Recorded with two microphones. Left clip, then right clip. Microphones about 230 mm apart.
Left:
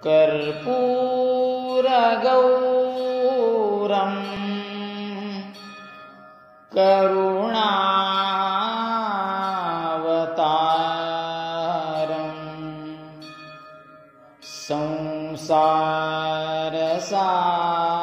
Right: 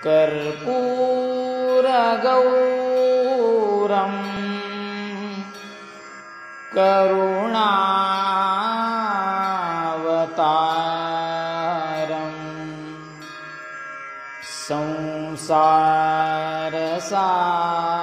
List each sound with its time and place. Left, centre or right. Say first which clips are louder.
0.0 s mantra: even; right
3.2 s music: right 2 dB; right
6.7 s mantra: right 1 dB; right
14.7 s mantra: even; right